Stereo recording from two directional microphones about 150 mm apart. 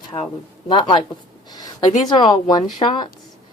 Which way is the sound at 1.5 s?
25° left (ahead or behind).